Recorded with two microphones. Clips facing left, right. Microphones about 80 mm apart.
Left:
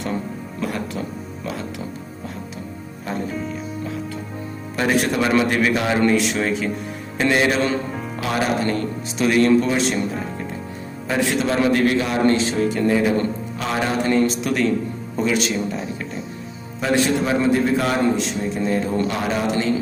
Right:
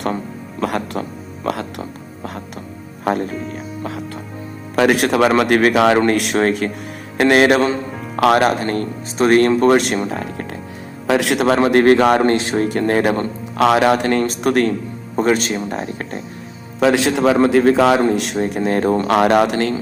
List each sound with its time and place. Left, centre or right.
0.6 s speech: right
3.0 s speech: right
4.8 s a man's voice: right
5.4 s speech: right
6.1 s speech: right
8.6 s speech: right
9.6 s a man's voice: right
11.6 s speech: right
13.6 s speech: right
16.8 s a man's voice: right
19.0 s speech: right